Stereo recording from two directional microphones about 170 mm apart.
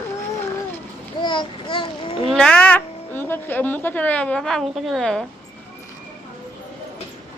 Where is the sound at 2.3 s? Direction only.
5° left (ahead or behind).